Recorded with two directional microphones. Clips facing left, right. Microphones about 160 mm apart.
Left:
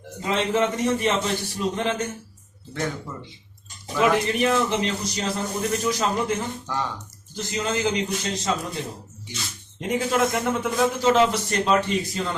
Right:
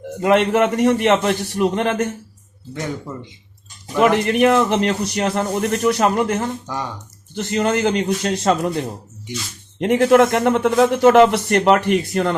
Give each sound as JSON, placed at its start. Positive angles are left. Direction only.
{"t": 0.2, "sound": "a man's voice", "side_deg": -65}
{"t": 3.9, "sound": "a man's voice", "side_deg": -65}
{"t": 9.8, "sound": "a man's voice", "side_deg": -65}